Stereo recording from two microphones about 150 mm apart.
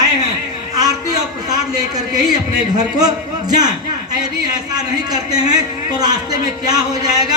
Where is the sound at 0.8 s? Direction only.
25° right (ahead or behind).